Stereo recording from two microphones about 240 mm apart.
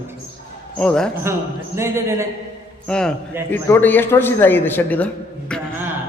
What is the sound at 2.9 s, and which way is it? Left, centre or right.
A man's voice, centre.